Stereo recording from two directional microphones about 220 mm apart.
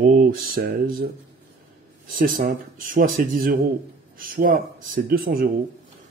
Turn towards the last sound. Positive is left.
turn(degrees=-40)  # may be behind; listen again after turning